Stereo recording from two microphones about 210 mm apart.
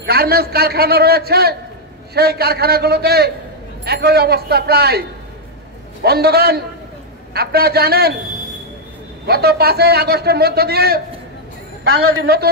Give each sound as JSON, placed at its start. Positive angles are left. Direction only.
{"t": 0.0, "sound": "a man's voice", "side_deg": -50}
{"t": 6.0, "sound": "a man's voice", "side_deg": -50}
{"t": 9.2, "sound": "a man's voice", "side_deg": -50}